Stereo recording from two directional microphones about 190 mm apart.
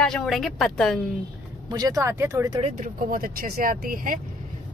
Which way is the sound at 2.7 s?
50° right (ahead or behind).